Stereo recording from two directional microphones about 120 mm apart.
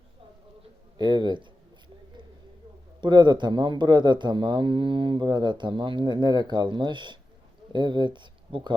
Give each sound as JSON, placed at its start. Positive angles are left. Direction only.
{"t": 0.9, "sound": "speech", "side_deg": -35}
{"t": 3.0, "sound": "speech", "side_deg": -40}